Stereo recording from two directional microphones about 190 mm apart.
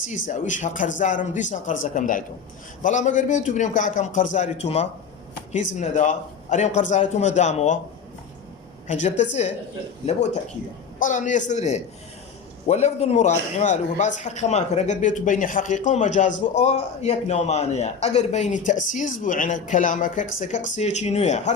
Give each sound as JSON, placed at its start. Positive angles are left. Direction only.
{"t": 0.3, "sound": "a man's voice", "side_deg": 40}
{"t": 8.9, "sound": "a man's voice", "side_deg": 35}
{"t": 11.0, "sound": "a man's voice", "side_deg": 40}